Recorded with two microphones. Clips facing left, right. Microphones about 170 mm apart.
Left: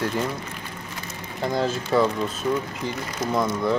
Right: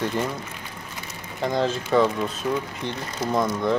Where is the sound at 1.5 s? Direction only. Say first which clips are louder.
Right 1 dB; 5° left (ahead or behind).